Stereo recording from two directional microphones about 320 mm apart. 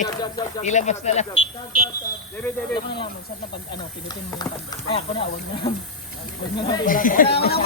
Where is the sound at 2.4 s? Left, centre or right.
Centre.